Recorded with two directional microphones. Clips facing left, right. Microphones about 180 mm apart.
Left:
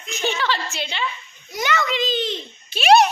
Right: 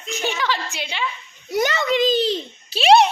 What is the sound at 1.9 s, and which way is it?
A child's voice, 45° right (ahead or behind).